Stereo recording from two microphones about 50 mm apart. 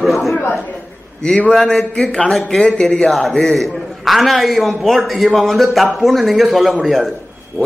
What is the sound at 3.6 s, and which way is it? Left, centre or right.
A man's voice, centre.